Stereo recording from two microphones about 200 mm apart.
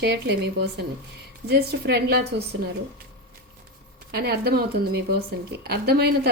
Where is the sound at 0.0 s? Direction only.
55° right (ahead or behind).